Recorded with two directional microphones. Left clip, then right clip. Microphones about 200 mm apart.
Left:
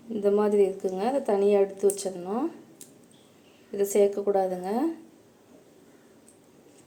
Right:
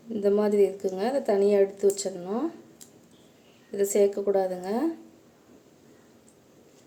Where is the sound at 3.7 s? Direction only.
10° right (ahead or behind).